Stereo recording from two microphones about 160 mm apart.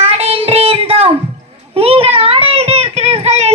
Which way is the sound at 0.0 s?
40° right (ahead or behind).